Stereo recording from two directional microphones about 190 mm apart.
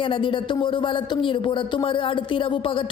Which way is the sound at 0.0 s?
25° left (ahead or behind).